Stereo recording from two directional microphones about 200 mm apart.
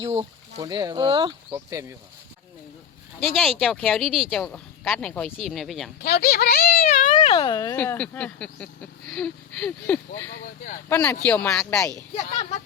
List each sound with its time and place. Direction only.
0.0 s speech: 30° right (ahead or behind); by 2.0 s 15° right (ahead or behind)
3.3 s speech: centre (ahead or behind)
6.0 s speech: 50° left (ahead or behind)
7.2 s a child's voice: 25° left (ahead or behind)
7.8 s speech: 5° left (ahead or behind)